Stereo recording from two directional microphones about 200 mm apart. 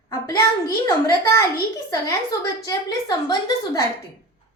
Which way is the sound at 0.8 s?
15° left (ahead or behind).